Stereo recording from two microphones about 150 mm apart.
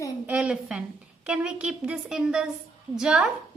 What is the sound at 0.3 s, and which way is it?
A woman's voice, 5° right (ahead or behind).